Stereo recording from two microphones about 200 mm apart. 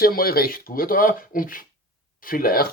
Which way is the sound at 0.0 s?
50° left (ahead or behind).